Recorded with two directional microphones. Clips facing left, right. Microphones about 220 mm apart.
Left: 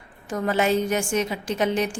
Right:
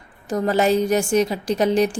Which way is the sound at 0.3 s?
35° right (ahead or behind).